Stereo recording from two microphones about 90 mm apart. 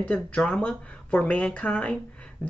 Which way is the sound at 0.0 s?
15° left (ahead or behind).